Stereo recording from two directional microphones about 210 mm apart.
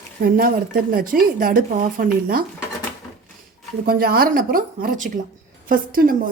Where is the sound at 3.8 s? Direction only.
45° right (ahead or behind).